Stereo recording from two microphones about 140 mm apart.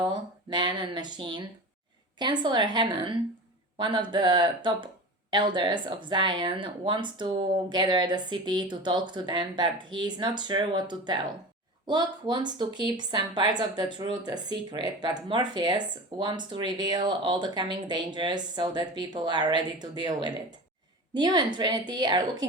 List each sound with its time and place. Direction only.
0.0 s speech: 35° right (ahead or behind)